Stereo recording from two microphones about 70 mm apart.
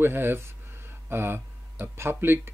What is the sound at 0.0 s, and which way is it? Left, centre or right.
Speech, right.